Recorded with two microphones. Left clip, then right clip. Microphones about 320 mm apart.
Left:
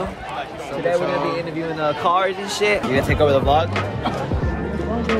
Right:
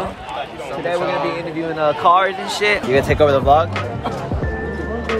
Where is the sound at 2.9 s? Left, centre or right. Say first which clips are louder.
Right 5 dB; centre.